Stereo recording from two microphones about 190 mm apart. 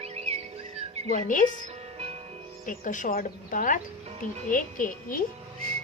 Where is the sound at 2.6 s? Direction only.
45° left (ahead or behind).